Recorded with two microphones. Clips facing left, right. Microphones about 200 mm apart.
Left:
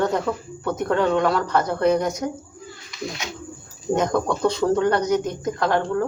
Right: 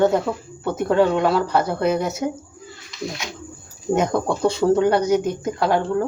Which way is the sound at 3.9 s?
10° right (ahead or behind).